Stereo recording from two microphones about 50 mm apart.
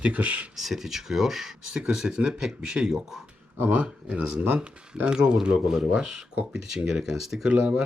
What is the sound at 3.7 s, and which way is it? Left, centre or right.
Speech, right.